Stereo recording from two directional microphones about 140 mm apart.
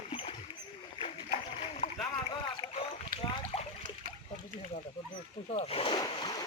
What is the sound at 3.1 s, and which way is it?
Rowboat, 90° right.